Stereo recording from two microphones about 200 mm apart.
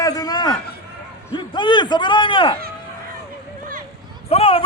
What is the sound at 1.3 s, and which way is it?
A man's voice, 20° left (ahead or behind).